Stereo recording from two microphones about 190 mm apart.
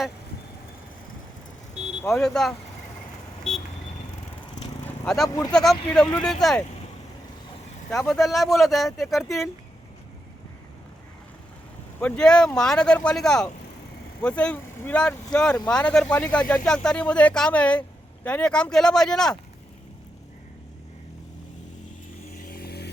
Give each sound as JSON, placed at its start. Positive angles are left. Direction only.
{"t": 1.7, "sound": "speech", "side_deg": 0}
{"t": 5.0, "sound": "speech", "side_deg": 0}
{"t": 8.1, "sound": "speech", "side_deg": 0}
{"t": 11.9, "sound": "speech", "side_deg": 5}
{"t": 22.4, "sound": "vehicle", "side_deg": 50}